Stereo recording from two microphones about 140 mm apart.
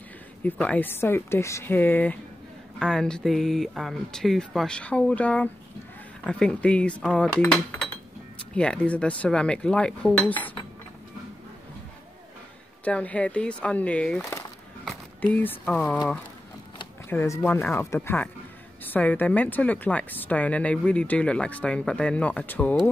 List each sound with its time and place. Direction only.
0.4 s speech: 10° left (ahead or behind)
12.8 s speech: 10° left (ahead or behind)
17.1 s speech: 15° left (ahead or behind)